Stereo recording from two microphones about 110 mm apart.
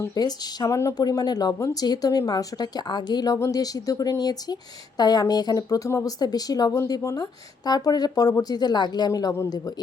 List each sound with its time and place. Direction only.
0.1 s a woman's voice: 35° left (ahead or behind)
3.3 s a woman's voice: 30° left (ahead or behind)